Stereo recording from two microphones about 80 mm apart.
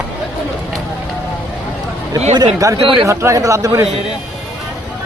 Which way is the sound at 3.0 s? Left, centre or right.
Right.